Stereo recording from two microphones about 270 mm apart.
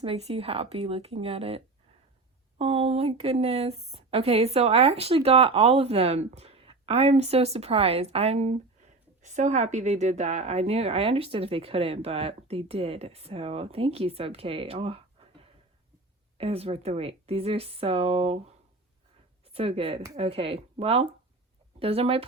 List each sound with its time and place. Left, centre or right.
0.0 s speech: right
19.5 s speech: right